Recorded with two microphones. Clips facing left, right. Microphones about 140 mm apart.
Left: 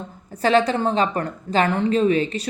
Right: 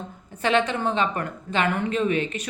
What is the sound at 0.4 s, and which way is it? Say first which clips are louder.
A woman's voice: left 4 dB; 35° left (ahead or behind).